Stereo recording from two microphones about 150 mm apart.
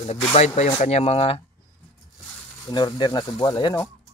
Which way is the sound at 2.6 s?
30° left (ahead or behind).